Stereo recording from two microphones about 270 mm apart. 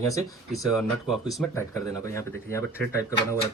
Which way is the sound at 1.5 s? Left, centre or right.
Centre.